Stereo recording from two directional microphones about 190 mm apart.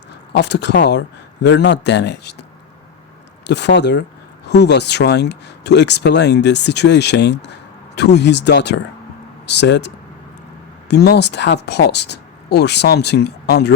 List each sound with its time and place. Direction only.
0.3 s speech: 65° left (ahead or behind)
3.4 s speech: 65° left (ahead or behind)